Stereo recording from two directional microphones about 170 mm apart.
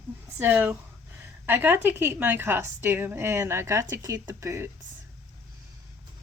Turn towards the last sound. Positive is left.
turn(degrees=-15)  # may be behind; listen again after turning